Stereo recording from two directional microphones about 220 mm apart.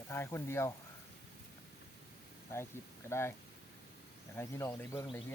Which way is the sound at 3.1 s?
10° left (ahead or behind).